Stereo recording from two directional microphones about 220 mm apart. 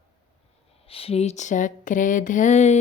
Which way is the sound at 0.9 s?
25° left (ahead or behind).